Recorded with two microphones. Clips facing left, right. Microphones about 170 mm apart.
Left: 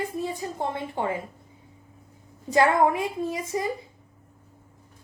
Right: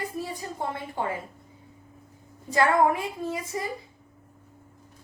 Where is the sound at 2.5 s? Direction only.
25° left (ahead or behind).